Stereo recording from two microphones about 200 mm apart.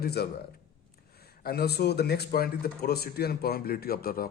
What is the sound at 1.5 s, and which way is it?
Speech, 55° left (ahead or behind).